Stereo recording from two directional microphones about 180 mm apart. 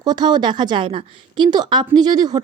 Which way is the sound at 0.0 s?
25° right (ahead or behind).